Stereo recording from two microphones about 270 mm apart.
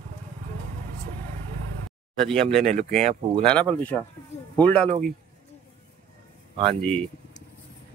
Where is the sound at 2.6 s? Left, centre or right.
Right.